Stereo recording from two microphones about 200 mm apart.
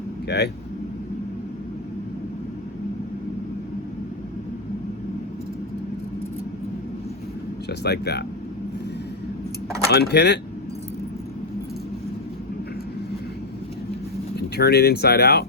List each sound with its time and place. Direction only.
0.3 s speech: 55° left (ahead or behind)
7.7 s speech: 55° left (ahead or behind)
9.9 s speech: 55° left (ahead or behind)
14.3 s speech: 55° left (ahead or behind)